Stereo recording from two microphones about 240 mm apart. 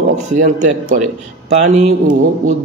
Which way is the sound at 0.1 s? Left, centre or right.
Right.